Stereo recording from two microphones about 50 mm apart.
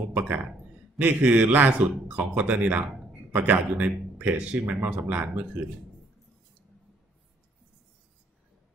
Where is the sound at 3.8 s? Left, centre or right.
Right.